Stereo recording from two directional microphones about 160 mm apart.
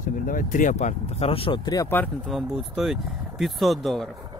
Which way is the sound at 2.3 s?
Centre (ahead or behind).